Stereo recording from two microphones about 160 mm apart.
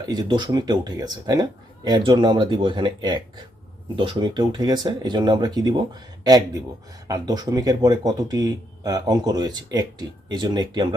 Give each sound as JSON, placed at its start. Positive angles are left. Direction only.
{"t": 0.0, "sound": "speech", "side_deg": -25}